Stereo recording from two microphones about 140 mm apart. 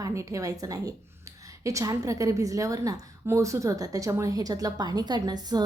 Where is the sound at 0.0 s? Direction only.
20° right (ahead or behind).